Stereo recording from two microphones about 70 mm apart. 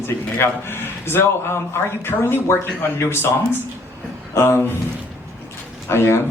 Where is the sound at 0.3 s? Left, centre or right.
Left.